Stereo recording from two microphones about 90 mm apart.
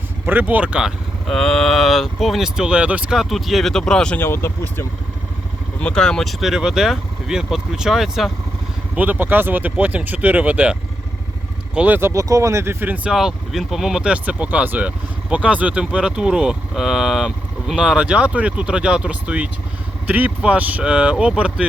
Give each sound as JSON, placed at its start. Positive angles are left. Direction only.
{"t": 0.3, "sound": "speech", "side_deg": -20}
{"t": 1.4, "sound": "speech", "side_deg": 5}
{"t": 3.2, "sound": "speech", "side_deg": 0}
{"t": 4.2, "sound": "speech", "side_deg": 25}
{"t": 5.8, "sound": "speech", "side_deg": 10}
{"t": 9.0, "sound": "speech", "side_deg": -20}
{"t": 11.9, "sound": "speech", "side_deg": -30}
{"t": 13.1, "sound": "speech", "side_deg": -5}